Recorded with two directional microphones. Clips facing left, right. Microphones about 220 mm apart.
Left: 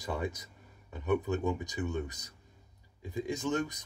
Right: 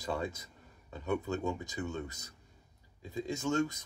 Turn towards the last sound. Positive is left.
turn(degrees=15)  # may be behind; listen again after turning